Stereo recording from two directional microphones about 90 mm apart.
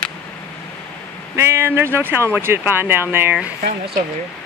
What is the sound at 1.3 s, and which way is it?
Speech, 30° right (ahead or behind).